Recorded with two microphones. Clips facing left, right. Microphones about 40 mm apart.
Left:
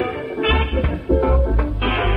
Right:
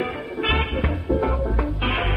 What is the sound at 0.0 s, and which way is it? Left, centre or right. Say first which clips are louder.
Music: left 4 dB; centre.